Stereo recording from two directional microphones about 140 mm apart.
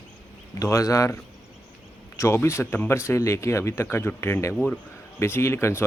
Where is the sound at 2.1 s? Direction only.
20° left (ahead or behind).